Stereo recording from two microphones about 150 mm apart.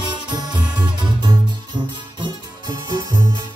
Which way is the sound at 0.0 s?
30° right (ahead or behind).